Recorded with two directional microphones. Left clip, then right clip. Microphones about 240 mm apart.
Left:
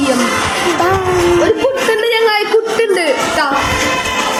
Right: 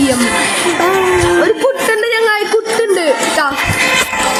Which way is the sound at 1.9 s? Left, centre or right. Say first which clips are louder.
Even; right.